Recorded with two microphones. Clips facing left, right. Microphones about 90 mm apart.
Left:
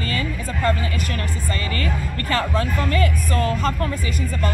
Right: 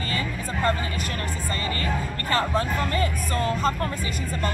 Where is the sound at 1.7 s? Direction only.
30° right (ahead or behind).